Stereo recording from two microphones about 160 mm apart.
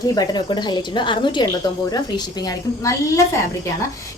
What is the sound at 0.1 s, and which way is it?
A woman's voice, 25° left (ahead or behind).